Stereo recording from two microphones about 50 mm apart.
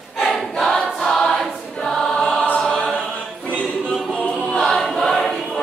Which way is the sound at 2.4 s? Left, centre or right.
Left.